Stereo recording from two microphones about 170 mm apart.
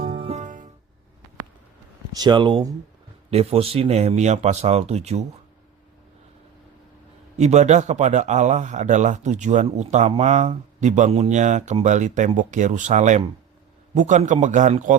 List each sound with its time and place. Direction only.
0.1 s music: 35° right (ahead or behind)
2.1 s speech: 25° right (ahead or behind)
7.3 s speech: 40° right (ahead or behind)